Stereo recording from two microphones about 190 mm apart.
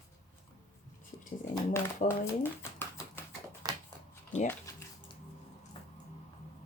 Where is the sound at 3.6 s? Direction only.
20° right (ahead or behind).